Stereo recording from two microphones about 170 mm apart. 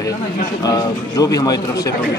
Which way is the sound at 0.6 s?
20° left (ahead or behind).